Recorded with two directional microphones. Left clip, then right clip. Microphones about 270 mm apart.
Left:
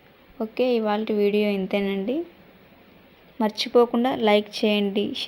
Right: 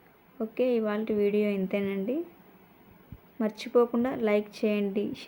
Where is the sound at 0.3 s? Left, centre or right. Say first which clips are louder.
Left 4 dB; centre.